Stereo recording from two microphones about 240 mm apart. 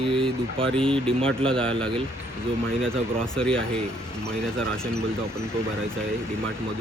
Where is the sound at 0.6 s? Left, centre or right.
Right.